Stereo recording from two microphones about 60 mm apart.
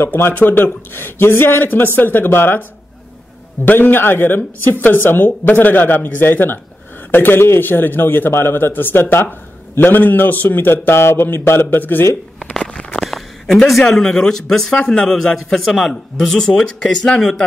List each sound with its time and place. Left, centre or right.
0.0 s speech: left
0.3 s speech: left
3.6 s speech: left
12.5 s a sound: centre
13.8 s a man's voice: centre